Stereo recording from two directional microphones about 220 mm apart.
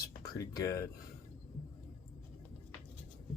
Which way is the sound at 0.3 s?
15° left (ahead or behind).